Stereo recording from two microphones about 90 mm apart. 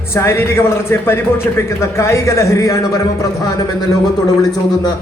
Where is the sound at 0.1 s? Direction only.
30° left (ahead or behind).